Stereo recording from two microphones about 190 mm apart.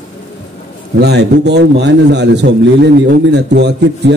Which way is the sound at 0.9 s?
60° right (ahead or behind).